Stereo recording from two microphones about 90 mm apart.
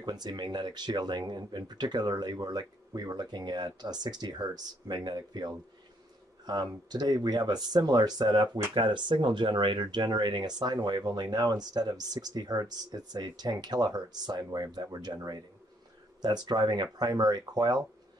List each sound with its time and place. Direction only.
0.0 s speech: 50° right (ahead or behind)
8.7 s speech: 60° right (ahead or behind)
16.2 s speech: 50° right (ahead or behind)